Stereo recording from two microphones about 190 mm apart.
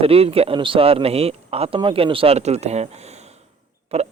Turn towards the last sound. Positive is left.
turn(degrees=-35)  # may be behind; listen again after turning